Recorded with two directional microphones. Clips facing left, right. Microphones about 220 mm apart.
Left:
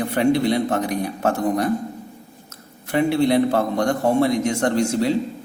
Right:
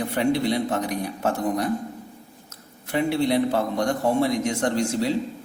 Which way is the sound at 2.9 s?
55° left (ahead or behind).